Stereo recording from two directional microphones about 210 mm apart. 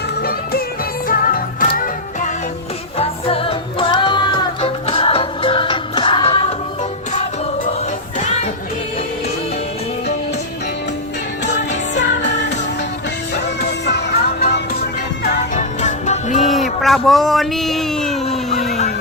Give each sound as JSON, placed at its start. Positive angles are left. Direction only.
{"t": 0.2, "sound": "music", "side_deg": 45}
{"t": 3.0, "sound": "music", "side_deg": 25}
{"t": 13.4, "sound": "music", "side_deg": 55}
{"t": 15.2, "sound": "music", "side_deg": 35}
{"t": 16.8, "sound": "a sound", "side_deg": 0}